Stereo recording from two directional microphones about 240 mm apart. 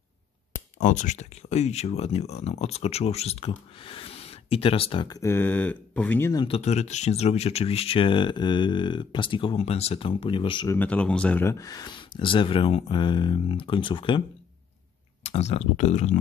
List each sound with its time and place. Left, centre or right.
0.7 s speech: left; by 6.4 s centre
6.4 s speech: left
10.8 s speech: centre
15.2 s speech: left